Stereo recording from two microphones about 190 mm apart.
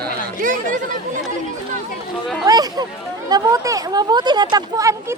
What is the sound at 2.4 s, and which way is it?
Speech, 20° right (ahead or behind).